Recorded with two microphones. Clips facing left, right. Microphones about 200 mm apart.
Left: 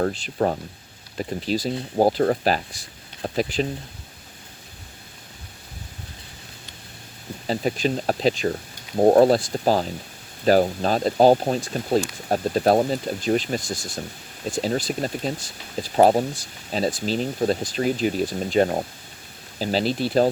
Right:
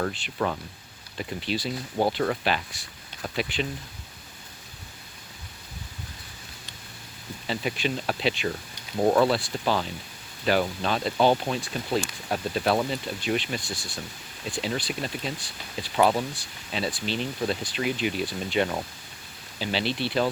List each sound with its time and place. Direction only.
0.0 s speech: 40° left (ahead or behind)
7.4 s speech: 40° left (ahead or behind)